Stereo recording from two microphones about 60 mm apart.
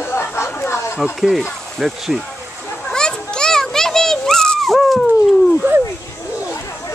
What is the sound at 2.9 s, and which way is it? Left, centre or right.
Children playing, centre.